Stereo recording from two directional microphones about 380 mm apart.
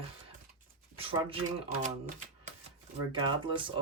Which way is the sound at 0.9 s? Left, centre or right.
Centre.